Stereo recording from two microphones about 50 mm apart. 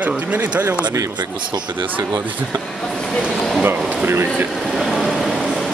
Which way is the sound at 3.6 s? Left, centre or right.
Right.